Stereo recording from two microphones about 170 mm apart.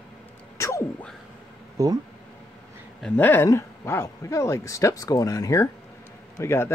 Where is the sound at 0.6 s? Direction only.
15° left (ahead or behind).